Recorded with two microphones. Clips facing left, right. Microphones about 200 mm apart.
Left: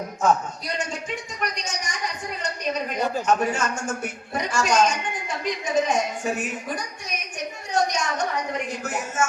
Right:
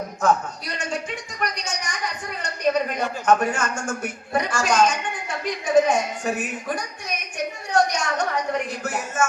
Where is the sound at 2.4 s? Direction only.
55° right (ahead or behind).